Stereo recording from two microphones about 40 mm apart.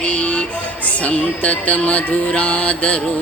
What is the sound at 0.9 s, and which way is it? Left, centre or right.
Music, left.